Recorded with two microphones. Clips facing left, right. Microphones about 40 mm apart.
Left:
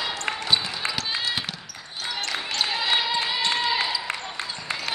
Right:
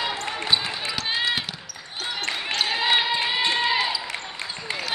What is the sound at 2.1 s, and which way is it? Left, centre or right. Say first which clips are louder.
Basketball bounce: right 2 dB; centre.